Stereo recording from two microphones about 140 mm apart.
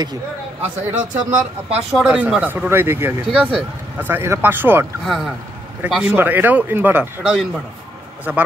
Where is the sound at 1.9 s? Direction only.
5° right (ahead or behind).